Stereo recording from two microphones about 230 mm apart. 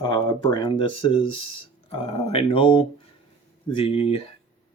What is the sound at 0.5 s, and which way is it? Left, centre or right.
Speech, left.